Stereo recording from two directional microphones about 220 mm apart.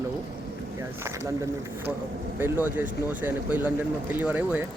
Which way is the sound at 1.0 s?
15° right (ahead or behind).